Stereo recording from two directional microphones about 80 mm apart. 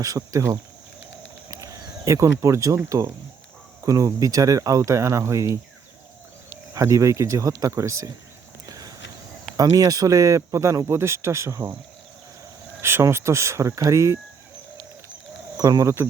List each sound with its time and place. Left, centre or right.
0.2 s speech: right
6.7 s speech: right
9.6 s speech: right
12.8 s speech: right
15.5 s speech: right